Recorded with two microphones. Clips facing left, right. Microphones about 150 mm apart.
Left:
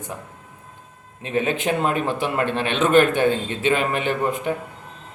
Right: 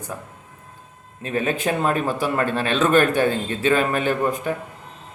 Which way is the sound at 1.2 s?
20° left (ahead or behind).